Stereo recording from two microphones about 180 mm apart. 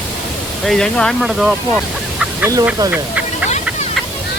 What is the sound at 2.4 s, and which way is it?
Speech, 20° right (ahead or behind).